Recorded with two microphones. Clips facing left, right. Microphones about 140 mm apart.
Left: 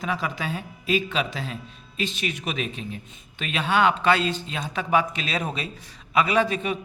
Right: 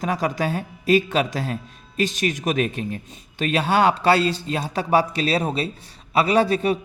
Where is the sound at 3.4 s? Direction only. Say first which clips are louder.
Right 3 dB; 40° right (ahead or behind).